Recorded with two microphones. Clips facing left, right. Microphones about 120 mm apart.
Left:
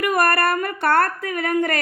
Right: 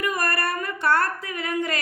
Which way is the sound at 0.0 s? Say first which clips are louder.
Left 7 dB; 60° left (ahead or behind).